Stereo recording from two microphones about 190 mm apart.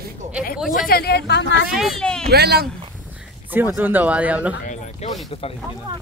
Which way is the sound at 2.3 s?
55° right (ahead or behind).